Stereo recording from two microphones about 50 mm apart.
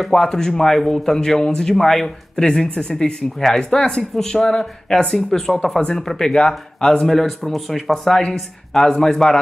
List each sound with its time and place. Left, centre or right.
0.0 s speech: centre